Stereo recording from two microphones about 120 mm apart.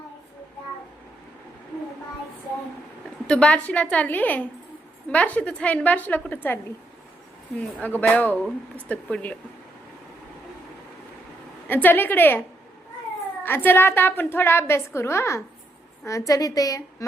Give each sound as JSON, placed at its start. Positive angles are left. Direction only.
{"t": 3.2, "sound": "a woman's voice", "side_deg": 10}
{"t": 7.8, "sound": "a woman's voice", "side_deg": 15}
{"t": 11.7, "sound": "a woman's voice", "side_deg": 15}
{"t": 13.4, "sound": "a woman's voice", "side_deg": 15}